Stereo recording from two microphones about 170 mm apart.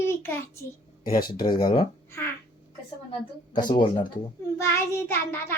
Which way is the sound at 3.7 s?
30° left (ahead or behind).